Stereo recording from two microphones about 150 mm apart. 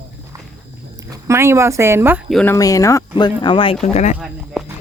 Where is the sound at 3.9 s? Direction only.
50° left (ahead or behind).